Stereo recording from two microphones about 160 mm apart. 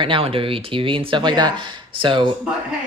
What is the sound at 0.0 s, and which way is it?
Speech, 35° right (ahead or behind).